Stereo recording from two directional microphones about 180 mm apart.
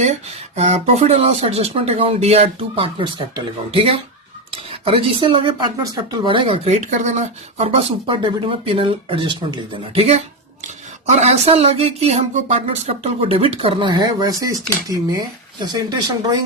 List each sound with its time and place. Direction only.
0.0 s speech: 35° right (ahead or behind); by 16.4 s 20° right (ahead or behind)